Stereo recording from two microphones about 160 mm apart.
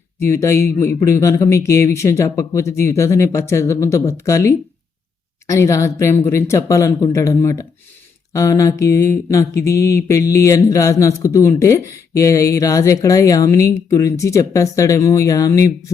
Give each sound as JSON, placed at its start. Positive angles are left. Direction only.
{"t": 0.2, "sound": "speech", "side_deg": 15}